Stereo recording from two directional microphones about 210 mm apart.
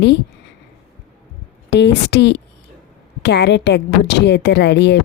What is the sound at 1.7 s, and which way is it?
Speech, 55° left (ahead or behind).